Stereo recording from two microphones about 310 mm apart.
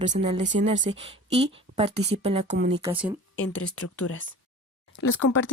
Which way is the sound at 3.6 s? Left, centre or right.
Left.